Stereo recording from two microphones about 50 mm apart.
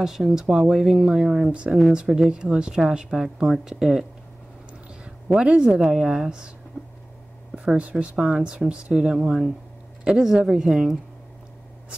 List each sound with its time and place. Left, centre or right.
0.0 s speech: centre
5.4 s speech: centre
7.5 s speech: right